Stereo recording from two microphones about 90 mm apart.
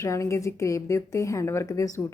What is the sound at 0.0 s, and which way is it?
Speech, 35° left (ahead or behind).